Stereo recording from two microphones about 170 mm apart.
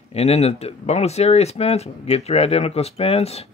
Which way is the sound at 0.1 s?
40° left (ahead or behind).